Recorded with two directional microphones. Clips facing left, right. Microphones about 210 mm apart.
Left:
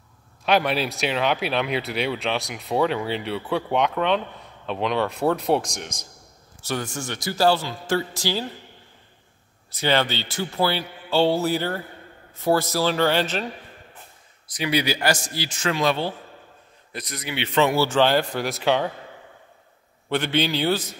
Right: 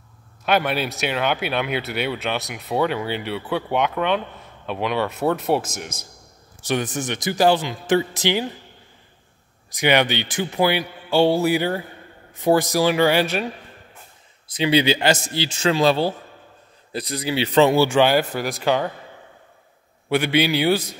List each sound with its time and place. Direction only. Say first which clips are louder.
0.5 s speech: even; centre (ahead or behind)
6.6 s speech: right 5 dB; 20° right (ahead or behind)
9.7 s a man's voice: right 3 dB; 15° right (ahead or behind)
14.5 s a man's voice: right 5 dB; 25° right (ahead or behind)
17.7 s speech: right 3 dB; 10° right (ahead or behind)
20.1 s a man's voice: right 4 dB; 10° right (ahead or behind)